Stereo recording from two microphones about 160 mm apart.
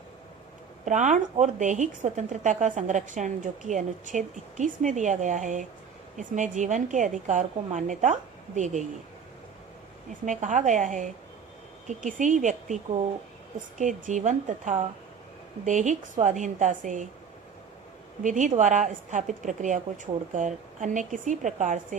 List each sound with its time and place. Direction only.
0.9 s speech: 50° right (ahead or behind)
10.2 s speech: 50° right (ahead or behind)
18.2 s speech: 50° right (ahead or behind)